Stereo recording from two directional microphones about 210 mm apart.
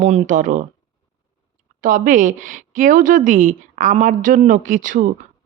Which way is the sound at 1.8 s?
40° right (ahead or behind).